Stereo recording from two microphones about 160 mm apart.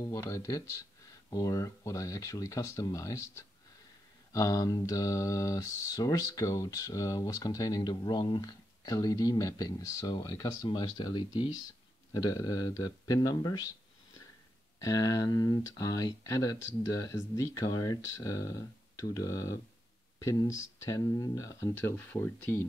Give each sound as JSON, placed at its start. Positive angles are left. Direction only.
{"t": 0.0, "sound": "speech", "side_deg": 20}
{"t": 4.3, "sound": "speech", "side_deg": 20}